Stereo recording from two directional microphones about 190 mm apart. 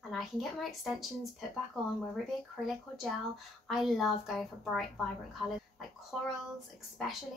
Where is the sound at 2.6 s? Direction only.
Centre (ahead or behind).